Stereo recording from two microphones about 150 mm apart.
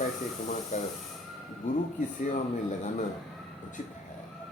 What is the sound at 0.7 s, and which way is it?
A man's voice, 50° left (ahead or behind).